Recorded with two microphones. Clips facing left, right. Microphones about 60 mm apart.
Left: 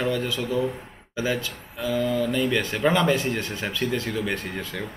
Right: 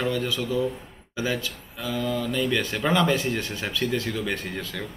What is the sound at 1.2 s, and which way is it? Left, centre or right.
Speech, centre.